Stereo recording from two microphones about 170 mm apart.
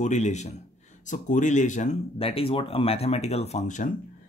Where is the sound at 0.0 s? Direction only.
45° left (ahead or behind).